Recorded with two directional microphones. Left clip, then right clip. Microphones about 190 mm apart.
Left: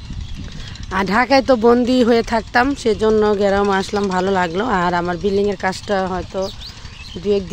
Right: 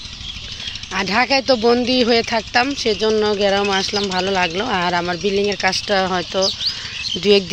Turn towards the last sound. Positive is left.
turn(degrees=-5)  # may be behind; listen again after turning